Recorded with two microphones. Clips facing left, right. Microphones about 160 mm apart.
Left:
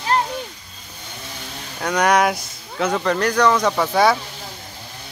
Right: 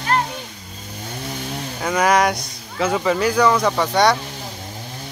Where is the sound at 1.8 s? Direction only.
5° right (ahead or behind).